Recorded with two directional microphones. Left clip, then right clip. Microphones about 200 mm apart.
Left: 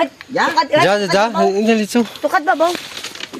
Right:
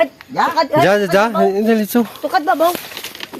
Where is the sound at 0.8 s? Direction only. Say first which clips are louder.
Right 4 dB; 40° right (ahead or behind).